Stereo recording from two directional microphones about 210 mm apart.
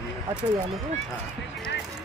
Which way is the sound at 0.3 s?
20° right (ahead or behind).